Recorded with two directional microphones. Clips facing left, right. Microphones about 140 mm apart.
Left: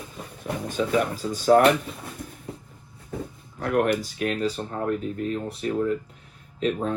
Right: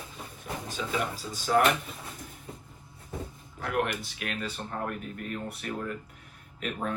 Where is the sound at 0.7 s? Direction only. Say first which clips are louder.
Left 8 dB; 50° left (ahead or behind).